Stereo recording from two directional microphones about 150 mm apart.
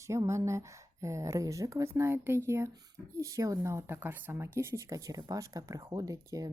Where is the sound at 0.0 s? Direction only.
20° right (ahead or behind).